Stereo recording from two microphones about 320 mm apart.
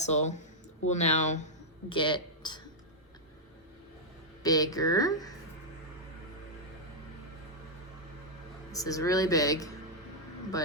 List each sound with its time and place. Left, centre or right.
0.0 s speech: left
4.4 s speech: centre
8.7 s speech: centre